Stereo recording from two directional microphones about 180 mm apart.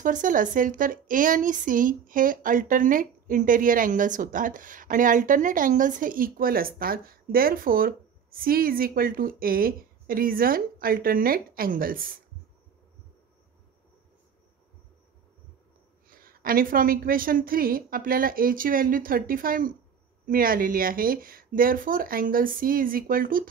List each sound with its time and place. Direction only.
0.0 s a woman's voice: 45° right (ahead or behind)
16.1 s a woman's voice: 55° right (ahead or behind)